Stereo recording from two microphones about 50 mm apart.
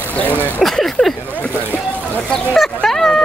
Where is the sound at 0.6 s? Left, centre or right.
Centre.